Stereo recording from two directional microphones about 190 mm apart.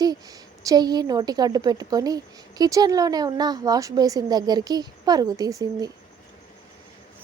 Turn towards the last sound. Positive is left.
turn(degrees=-20)  # may be behind; listen again after turning